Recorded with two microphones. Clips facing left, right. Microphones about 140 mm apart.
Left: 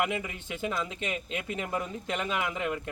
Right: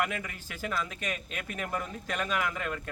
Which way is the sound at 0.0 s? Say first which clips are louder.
Left 2 dB; 20° left (ahead or behind).